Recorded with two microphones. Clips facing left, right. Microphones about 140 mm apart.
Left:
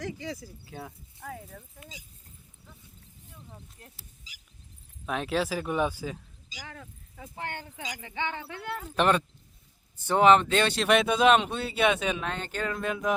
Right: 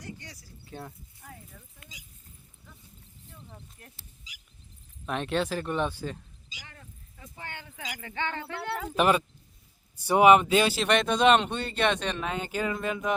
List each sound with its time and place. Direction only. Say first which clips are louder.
0.2 s speech: left 13 dB; 90° left
0.6 s speech: even; 5° left (ahead or behind)
1.2 s speech: left 8 dB; 80° left
3.8 s speech: even; 30° left (ahead or behind)
5.0 s speech: even; centre (ahead or behind)
7.9 s speech: right 1 dB; 15° left (ahead or behind)
8.5 s speech: right 3 dB; 90° right
9.0 s speech: even; 5° right (ahead or behind)
12.3 s speech: right 2 dB; 10° right (ahead or behind)